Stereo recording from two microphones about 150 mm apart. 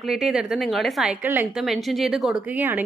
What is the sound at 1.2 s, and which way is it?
Speech, 15° right (ahead or behind).